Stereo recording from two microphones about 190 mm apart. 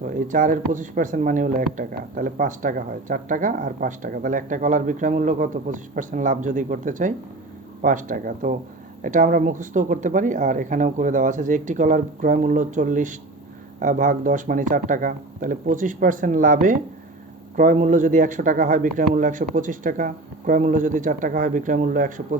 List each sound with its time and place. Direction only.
0.1 s speech: 45° right (ahead or behind)